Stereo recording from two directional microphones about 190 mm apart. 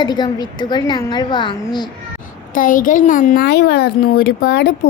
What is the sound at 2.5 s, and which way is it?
A woman's voice, 45° left (ahead or behind).